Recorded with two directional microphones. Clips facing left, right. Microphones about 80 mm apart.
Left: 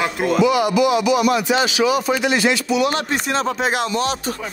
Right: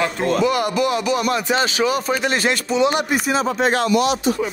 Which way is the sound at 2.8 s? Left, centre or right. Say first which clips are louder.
Right 2 dB; centre.